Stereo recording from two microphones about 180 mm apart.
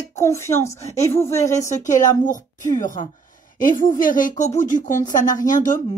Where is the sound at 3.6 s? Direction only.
50° left (ahead or behind).